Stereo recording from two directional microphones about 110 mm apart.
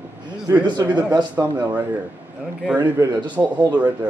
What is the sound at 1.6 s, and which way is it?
Speech, 15° right (ahead or behind).